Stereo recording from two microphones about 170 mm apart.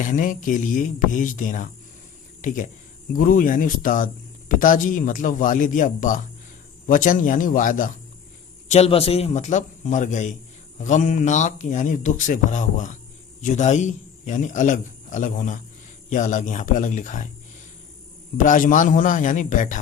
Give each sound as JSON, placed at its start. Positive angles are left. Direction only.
{"t": 0.0, "sound": "speech", "side_deg": 50}
{"t": 8.6, "sound": "a man's voice", "side_deg": 40}
{"t": 18.3, "sound": "speech", "side_deg": 50}